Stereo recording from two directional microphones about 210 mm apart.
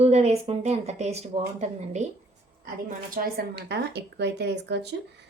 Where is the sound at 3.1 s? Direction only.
45° right (ahead or behind).